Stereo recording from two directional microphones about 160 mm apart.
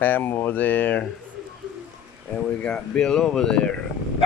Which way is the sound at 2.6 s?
5° left (ahead or behind).